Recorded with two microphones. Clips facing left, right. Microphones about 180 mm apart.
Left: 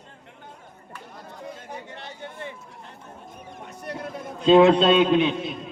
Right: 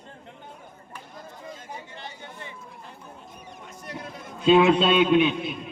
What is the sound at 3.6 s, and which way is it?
Vehicle, 60° left (ahead or behind).